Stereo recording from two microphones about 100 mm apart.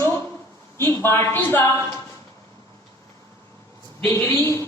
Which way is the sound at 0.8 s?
25° left (ahead or behind).